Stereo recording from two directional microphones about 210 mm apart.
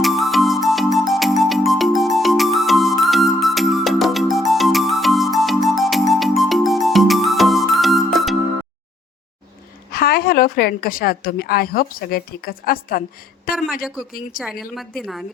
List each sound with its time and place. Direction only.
0.0 s music: centre (ahead or behind)
9.9 s a woman's voice: 45° left (ahead or behind)
14.3 s a woman's voice: 45° left (ahead or behind)
14.8 s a woman's voice: centre (ahead or behind)